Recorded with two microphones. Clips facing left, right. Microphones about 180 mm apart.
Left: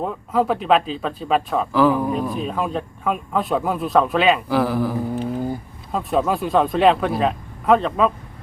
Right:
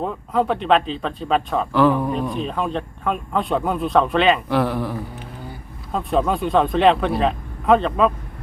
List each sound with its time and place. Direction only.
0.0 s speech: centre (ahead or behind)